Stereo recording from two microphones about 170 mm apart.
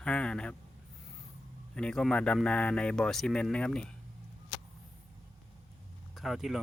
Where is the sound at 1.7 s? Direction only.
5° left (ahead or behind).